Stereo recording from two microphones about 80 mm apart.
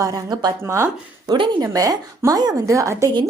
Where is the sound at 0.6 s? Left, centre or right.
Right.